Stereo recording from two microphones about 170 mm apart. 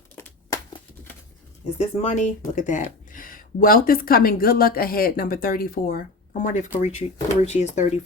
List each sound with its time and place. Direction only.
1.8 s speech: 40° left (ahead or behind)